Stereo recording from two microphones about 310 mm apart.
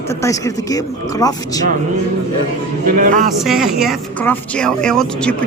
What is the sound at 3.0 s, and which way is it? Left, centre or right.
Speech, right.